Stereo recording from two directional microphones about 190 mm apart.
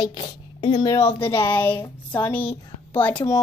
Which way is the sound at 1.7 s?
25° left (ahead or behind).